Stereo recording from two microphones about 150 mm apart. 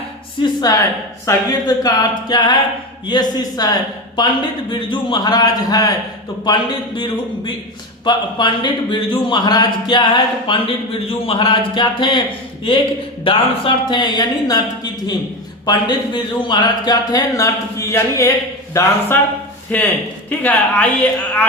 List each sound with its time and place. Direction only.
0.4 s speech: 25° left (ahead or behind)
13.2 s speech: 35° left (ahead or behind)
15.6 s speech: 30° left (ahead or behind); by 21.4 s 10° left (ahead or behind)